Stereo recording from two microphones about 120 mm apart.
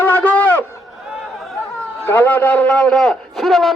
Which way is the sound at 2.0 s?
15° left (ahead or behind).